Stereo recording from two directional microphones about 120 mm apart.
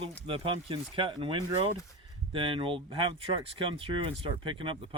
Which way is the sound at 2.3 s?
45° right (ahead or behind).